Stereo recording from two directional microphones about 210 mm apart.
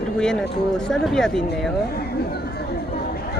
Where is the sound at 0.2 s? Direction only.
5° left (ahead or behind).